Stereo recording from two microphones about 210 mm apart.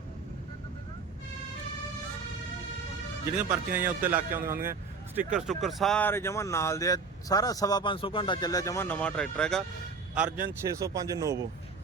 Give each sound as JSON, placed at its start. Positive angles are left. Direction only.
{"t": 3.3, "sound": "a man's voice", "side_deg": -10}
{"t": 10.7, "sound": "speech", "side_deg": -15}